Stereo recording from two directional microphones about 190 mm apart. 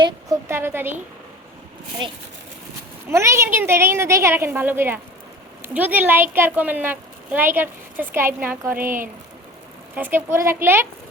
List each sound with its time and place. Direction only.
0.0 s a sound: 15° right (ahead or behind)
2.0 s a woman's voice: 25° right (ahead or behind)
9.9 s a woman's voice: 10° right (ahead or behind)